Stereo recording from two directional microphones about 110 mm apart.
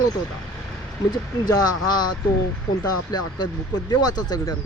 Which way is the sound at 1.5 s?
35° left (ahead or behind).